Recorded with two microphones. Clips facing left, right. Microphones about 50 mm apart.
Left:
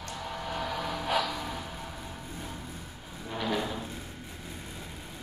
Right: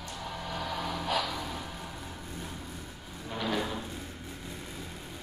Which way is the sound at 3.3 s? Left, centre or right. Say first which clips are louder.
Left 1 dB; centre.